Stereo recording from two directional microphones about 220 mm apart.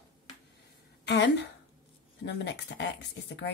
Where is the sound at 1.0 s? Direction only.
50° left (ahead or behind).